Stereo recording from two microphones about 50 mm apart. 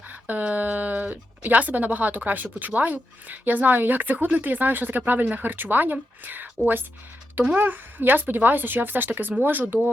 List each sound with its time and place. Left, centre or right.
0.1 s speech: right